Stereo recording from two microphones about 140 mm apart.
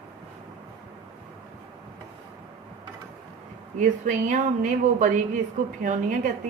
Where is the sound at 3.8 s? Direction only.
60° right (ahead or behind).